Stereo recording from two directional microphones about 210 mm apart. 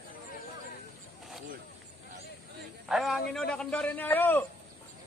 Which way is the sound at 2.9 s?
Centre (ahead or behind).